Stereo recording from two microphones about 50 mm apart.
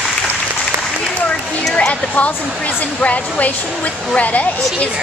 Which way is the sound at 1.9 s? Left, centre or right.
Left.